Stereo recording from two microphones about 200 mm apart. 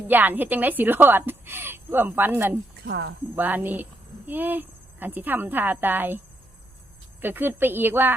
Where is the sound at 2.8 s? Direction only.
55° right (ahead or behind).